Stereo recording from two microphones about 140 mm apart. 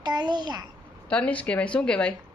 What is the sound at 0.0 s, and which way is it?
Speech, 30° right (ahead or behind).